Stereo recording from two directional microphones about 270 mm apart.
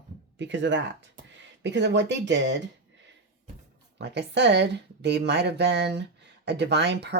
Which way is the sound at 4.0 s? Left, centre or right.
Right.